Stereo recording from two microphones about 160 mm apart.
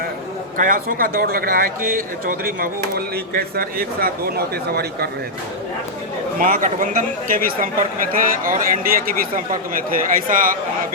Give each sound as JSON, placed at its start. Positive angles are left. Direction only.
{"t": 0.5, "sound": "speech", "side_deg": -60}
{"t": 6.4, "sound": "speech", "side_deg": -60}